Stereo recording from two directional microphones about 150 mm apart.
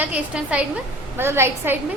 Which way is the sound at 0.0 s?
10° right (ahead or behind).